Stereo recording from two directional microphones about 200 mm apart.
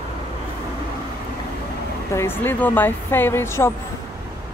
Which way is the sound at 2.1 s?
10° left (ahead or behind).